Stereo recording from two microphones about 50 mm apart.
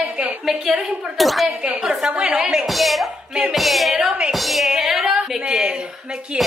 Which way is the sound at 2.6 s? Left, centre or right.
Centre.